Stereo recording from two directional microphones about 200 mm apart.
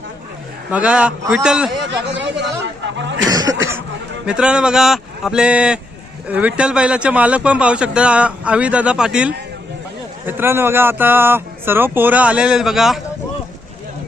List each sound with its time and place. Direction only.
0.7 s speech: 5° right (ahead or behind)
1.8 s a man's voice: 60° right (ahead or behind)
3.2 s speech: 20° right (ahead or behind)
4.3 s speech: 5° right (ahead or behind)